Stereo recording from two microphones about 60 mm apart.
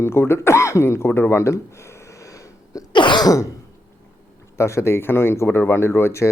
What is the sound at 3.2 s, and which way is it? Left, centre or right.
Throat clearing, left.